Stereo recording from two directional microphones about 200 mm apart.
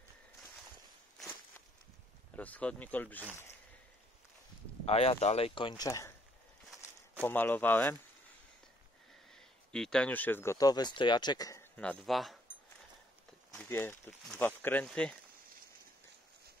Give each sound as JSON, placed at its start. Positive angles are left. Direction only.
{"t": 2.3, "sound": "speech", "side_deg": 5}
{"t": 4.8, "sound": "speech", "side_deg": 30}
{"t": 7.2, "sound": "speech", "side_deg": 10}
{"t": 9.3, "sound": "speech", "side_deg": 5}
{"t": 11.7, "sound": "speech", "side_deg": 5}
{"t": 13.6, "sound": "speech", "side_deg": 10}